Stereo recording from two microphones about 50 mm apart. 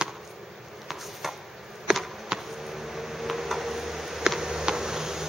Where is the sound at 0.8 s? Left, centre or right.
Centre.